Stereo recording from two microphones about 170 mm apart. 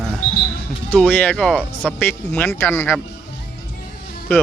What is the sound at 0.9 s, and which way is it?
Speech, 10° left (ahead or behind).